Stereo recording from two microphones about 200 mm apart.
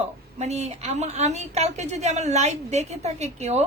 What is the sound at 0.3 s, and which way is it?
A woman's voice, 35° right (ahead or behind).